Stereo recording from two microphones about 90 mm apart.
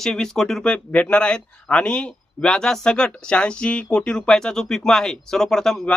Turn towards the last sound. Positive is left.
turn(degrees=5)  # may be behind; listen again after turning